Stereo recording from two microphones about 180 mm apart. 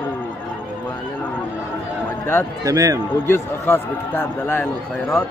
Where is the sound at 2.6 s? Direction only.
20° right (ahead or behind).